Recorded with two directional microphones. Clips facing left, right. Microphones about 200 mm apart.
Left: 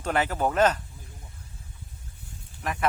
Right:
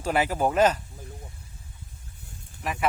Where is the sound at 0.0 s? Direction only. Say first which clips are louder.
Right 1 dB; 10° right (ahead or behind).